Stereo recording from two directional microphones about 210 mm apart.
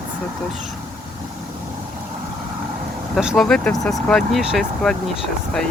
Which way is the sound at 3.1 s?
Centre (ahead or behind).